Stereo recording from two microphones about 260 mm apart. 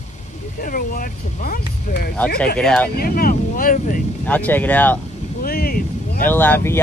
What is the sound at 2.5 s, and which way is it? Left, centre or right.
Speech, centre.